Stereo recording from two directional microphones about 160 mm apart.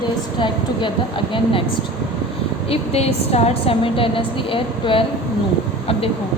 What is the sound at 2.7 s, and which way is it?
A woman's voice, 40° left (ahead or behind).